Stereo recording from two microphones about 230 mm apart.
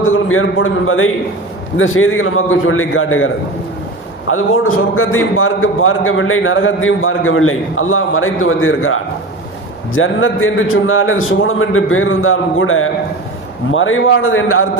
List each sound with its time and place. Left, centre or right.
0.0 s a man's voice: left
4.3 s a man's voice: left